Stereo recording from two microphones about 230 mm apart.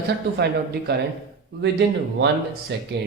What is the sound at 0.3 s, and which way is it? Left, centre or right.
Speech, right.